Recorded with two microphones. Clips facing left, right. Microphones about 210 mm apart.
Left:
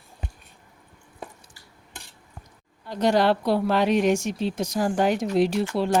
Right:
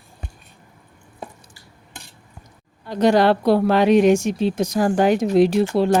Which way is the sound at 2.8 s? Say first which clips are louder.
Right 5 dB; 80° right.